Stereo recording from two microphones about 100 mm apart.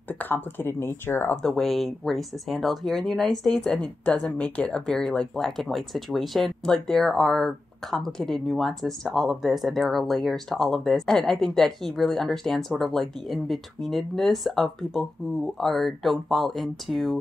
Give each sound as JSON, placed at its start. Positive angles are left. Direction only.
{"t": 0.1, "sound": "speech", "side_deg": 20}
{"t": 1.3, "sound": "speech", "side_deg": 5}